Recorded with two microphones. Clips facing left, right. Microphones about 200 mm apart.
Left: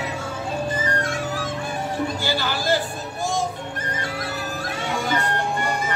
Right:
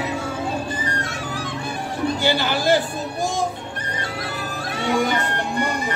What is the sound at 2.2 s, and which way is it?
Speech, 20° right (ahead or behind).